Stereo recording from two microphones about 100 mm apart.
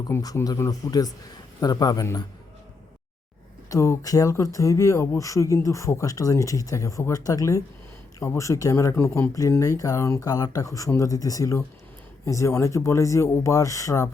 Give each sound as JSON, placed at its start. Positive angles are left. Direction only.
{"t": 0.1, "sound": "speech", "side_deg": 25}
{"t": 3.7, "sound": "speech", "side_deg": 35}